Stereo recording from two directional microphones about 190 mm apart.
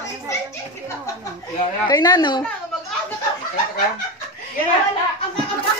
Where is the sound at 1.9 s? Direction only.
20° left (ahead or behind).